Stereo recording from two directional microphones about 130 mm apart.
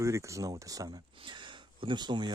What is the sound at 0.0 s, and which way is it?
Speech, 25° right (ahead or behind).